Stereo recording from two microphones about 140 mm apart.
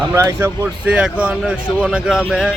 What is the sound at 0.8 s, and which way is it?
A man's voice, 10° right (ahead or behind).